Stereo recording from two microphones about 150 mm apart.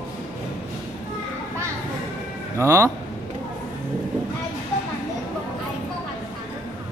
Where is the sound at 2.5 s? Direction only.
20° right (ahead or behind).